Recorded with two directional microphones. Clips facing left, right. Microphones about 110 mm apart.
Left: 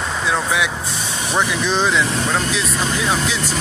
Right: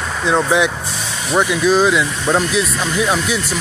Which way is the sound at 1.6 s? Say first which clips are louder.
Right 5 dB; 10° right (ahead or behind).